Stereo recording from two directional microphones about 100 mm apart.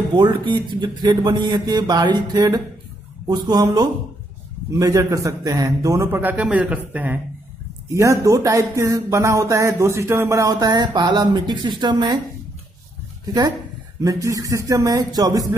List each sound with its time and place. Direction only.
0.1 s speech: 50° right (ahead or behind); by 7.2 s 15° right (ahead or behind)
7.9 s speech: 30° right (ahead or behind)
14.0 s speech: 35° right (ahead or behind)